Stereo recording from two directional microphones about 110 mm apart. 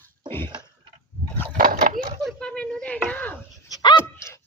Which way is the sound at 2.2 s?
5° left (ahead or behind).